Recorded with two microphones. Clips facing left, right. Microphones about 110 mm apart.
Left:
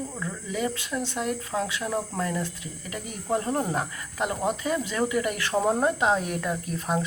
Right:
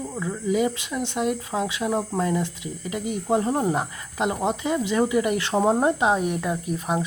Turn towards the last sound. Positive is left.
turn(degrees=-15)  # may be behind; listen again after turning